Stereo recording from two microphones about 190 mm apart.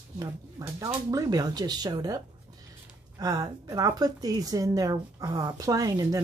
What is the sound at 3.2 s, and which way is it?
A woman's voice, 20° right (ahead or behind).